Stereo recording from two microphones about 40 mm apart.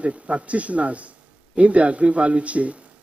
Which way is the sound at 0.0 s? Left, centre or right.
Right.